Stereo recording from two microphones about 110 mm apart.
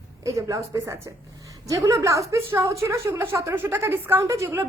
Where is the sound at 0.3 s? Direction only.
30° right (ahead or behind).